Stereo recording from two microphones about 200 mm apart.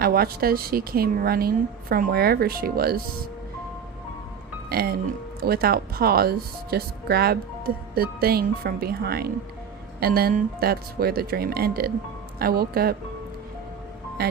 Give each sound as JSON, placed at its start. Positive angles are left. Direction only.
{"t": 0.0, "sound": "speech", "side_deg": -50}
{"t": 4.7, "sound": "speech", "side_deg": -50}
{"t": 14.2, "sound": "speech", "side_deg": -50}